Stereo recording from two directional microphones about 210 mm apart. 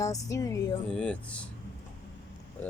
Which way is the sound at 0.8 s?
5° left (ahead or behind).